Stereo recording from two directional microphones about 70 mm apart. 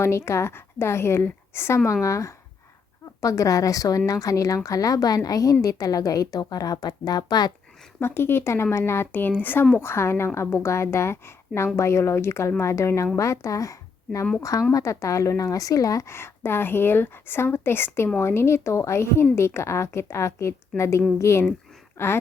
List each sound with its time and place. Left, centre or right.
0.0 s a woman's voice: left
7.9 s a woman's voice: left